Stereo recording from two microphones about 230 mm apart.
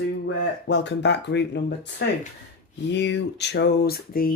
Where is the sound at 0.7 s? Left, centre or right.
Left.